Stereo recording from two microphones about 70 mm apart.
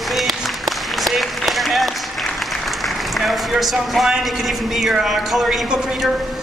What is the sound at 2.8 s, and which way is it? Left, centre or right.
A man's voice, centre.